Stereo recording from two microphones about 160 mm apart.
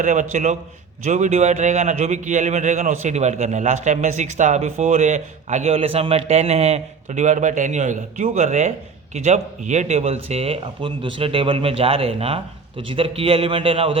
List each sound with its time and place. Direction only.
0.0 s speech: 50° right (ahead or behind); by 14.0 s 35° right (ahead or behind)